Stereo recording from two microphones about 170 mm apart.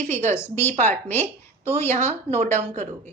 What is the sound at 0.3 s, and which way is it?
Speech, 15° left (ahead or behind).